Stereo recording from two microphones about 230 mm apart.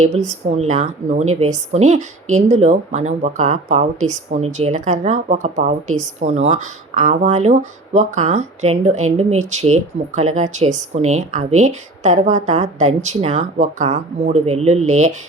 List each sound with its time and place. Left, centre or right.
0.0 s a woman's voice: right